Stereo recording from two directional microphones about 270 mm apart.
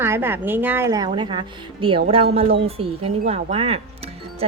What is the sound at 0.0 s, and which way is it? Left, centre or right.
A woman's voice, centre.